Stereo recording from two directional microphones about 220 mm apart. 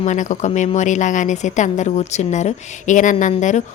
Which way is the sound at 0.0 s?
35° left (ahead or behind).